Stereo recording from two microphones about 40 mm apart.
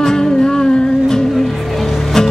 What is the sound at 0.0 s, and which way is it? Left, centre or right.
Music, centre.